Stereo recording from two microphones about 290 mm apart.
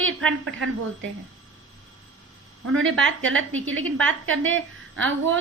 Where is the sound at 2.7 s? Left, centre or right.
Right.